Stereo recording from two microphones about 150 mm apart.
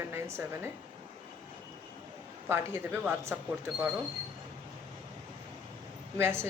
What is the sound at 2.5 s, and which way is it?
Speech, 15° right (ahead or behind).